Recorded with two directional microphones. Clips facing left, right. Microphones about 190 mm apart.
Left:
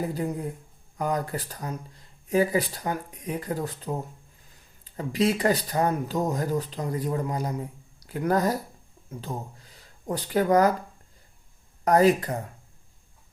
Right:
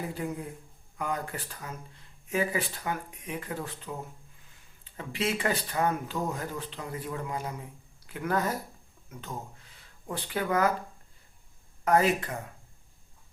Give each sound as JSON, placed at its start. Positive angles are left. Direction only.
{"t": 0.1, "sound": "speech", "side_deg": 35}
{"t": 4.9, "sound": "speech", "side_deg": 40}
{"t": 11.9, "sound": "speech", "side_deg": 40}